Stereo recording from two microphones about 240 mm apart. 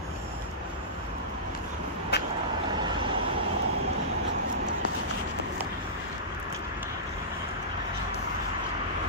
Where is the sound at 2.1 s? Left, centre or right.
Left.